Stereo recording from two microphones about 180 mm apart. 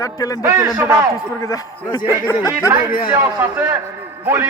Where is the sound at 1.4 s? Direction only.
20° left (ahead or behind).